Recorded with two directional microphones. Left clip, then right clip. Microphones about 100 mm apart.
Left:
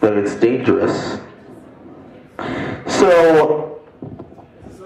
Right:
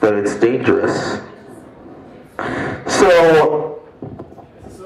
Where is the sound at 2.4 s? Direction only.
40° left (ahead or behind).